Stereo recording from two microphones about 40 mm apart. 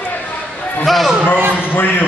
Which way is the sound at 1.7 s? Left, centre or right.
Left.